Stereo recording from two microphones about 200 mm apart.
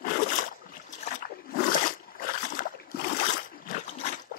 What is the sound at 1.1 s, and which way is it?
Wild animals, 40° left (ahead or behind).